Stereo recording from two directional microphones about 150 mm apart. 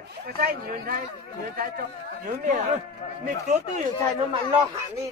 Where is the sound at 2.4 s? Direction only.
55° right (ahead or behind).